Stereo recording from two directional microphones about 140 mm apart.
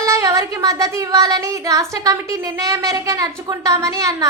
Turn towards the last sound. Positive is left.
turn(degrees=-25)  # may be behind; listen again after turning